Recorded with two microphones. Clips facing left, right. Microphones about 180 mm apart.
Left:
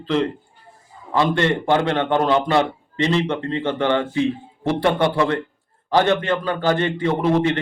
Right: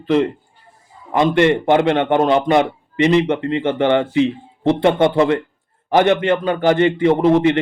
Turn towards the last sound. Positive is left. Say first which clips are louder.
# right 5 dB
turn(degrees=-20)  # may be behind; listen again after turning